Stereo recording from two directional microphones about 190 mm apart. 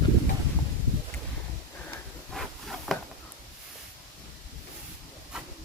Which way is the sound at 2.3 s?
Centre (ahead or behind).